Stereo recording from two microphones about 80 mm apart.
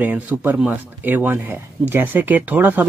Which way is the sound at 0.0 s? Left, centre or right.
Centre.